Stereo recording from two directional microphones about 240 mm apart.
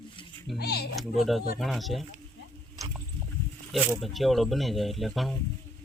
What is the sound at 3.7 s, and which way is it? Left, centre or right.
Speech, centre.